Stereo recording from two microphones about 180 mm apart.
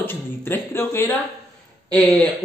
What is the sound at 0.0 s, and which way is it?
Speech, 10° left (ahead or behind).